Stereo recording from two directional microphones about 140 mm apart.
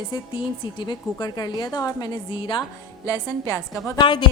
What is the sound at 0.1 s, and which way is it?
A woman's voice, 35° left (ahead or behind).